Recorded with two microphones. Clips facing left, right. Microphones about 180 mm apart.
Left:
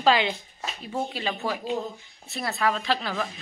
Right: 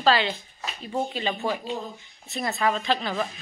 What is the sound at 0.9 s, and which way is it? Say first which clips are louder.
A woman's voice: right 2 dB; centre (ahead or behind).